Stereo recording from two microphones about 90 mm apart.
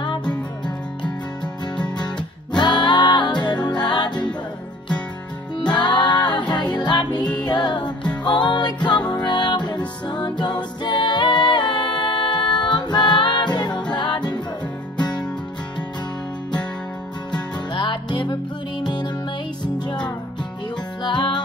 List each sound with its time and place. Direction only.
1.8 s music: 55° left (ahead or behind)
5.8 s music: 55° left (ahead or behind)
8.0 s music: 15° left (ahead or behind)
8.3 s music: 60° left (ahead or behind)
17.3 s music: 60° left (ahead or behind)
21.0 s music: 55° left (ahead or behind)